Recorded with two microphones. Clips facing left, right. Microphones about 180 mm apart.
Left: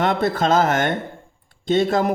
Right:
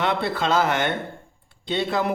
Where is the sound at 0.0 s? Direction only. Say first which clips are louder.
Left 4 dB; 45° left (ahead or behind).